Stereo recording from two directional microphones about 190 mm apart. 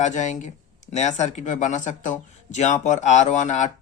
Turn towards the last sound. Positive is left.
turn(degrees=40)  # may be behind; listen again after turning